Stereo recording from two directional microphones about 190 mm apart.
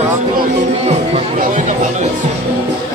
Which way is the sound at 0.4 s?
35° right (ahead or behind).